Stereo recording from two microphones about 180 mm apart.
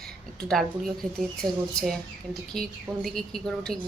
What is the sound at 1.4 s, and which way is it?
Speech, 20° right (ahead or behind).